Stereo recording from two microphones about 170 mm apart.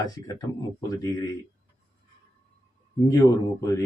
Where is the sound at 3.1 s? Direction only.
20° left (ahead or behind).